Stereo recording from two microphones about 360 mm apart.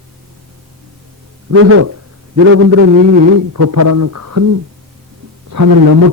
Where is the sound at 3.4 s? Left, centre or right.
Right.